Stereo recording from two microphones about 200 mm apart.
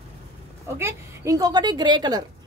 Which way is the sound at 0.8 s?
15° right (ahead or behind).